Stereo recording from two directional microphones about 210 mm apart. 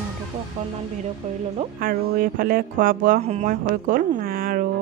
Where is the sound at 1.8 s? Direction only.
40° right (ahead or behind).